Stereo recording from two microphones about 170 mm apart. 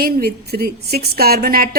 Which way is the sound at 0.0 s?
65° right (ahead or behind).